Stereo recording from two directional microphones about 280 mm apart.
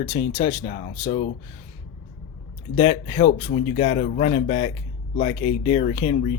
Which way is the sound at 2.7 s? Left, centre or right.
Left.